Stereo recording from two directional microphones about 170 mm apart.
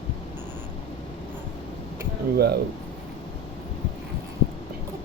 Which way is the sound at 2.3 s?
70° right (ahead or behind).